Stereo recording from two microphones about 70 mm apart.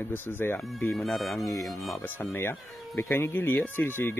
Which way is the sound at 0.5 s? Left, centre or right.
Centre.